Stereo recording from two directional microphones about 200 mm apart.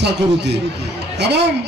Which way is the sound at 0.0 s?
60° right (ahead or behind).